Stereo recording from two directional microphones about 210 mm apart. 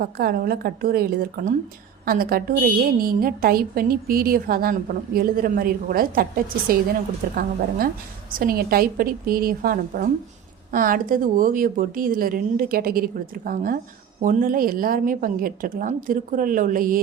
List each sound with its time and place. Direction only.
0.0 s a woman's voice: 45° right (ahead or behind)
8.4 s a woman's voice: 45° right (ahead or behind)